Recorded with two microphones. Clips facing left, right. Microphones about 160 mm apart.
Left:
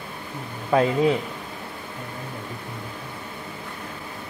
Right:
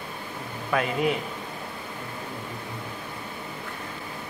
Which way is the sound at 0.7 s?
30° left (ahead or behind).